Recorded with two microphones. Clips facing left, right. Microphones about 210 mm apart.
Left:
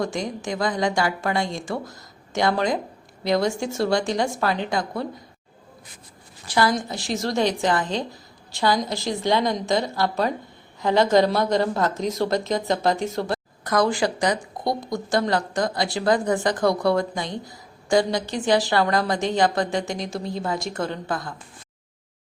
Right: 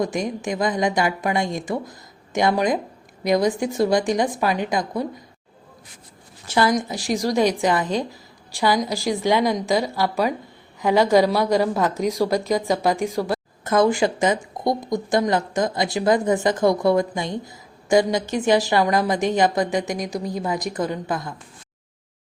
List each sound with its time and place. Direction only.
0.0 s speech: 20° right (ahead or behind)
6.5 s a woman's voice: 15° right (ahead or behind)
13.7 s a woman's voice: 20° right (ahead or behind)